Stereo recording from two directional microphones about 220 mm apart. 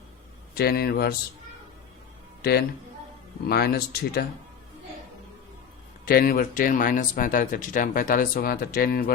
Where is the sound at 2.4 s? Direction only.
45° left (ahead or behind).